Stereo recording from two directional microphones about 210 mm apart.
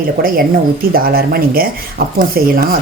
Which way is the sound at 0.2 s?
45° right (ahead or behind).